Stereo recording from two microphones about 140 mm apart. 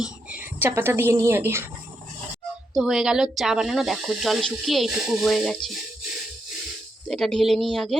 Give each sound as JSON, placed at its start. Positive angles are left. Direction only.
{"t": 0.0, "sound": "a woman's voice", "side_deg": -10}
{"t": 2.7, "sound": "speech", "side_deg": -5}
{"t": 7.1, "sound": "speech", "side_deg": 5}